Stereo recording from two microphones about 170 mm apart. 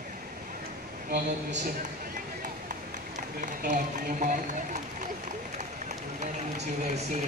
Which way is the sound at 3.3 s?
50° right (ahead or behind).